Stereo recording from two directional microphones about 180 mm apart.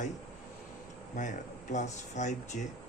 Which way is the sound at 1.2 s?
45° left (ahead or behind).